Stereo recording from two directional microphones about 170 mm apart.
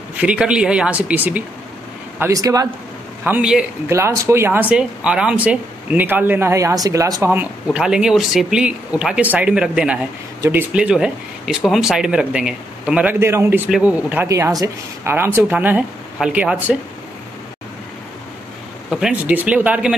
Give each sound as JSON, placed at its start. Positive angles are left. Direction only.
{"t": 0.2, "sound": "a man's voice", "side_deg": -5}
{"t": 3.3, "sound": "speech", "side_deg": -5}
{"t": 7.6, "sound": "speech", "side_deg": -5}
{"t": 18.9, "sound": "speech", "side_deg": -5}